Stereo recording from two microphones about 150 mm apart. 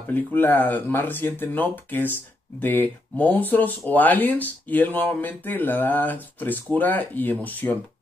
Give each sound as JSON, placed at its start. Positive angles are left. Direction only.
{"t": 0.1, "sound": "speech", "side_deg": 10}